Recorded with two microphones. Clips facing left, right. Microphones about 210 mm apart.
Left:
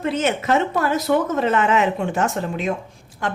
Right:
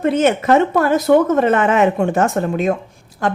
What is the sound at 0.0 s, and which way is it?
A woman's voice, 55° right (ahead or behind).